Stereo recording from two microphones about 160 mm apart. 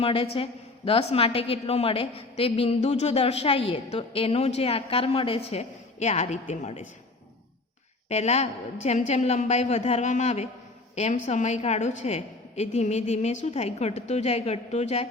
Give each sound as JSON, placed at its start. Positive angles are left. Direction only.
{"t": 0.0, "sound": "a woman's voice", "side_deg": 35}
{"t": 8.1, "sound": "a woman's voice", "side_deg": 45}